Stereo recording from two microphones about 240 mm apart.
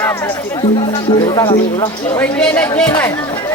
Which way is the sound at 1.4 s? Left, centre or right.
Centre.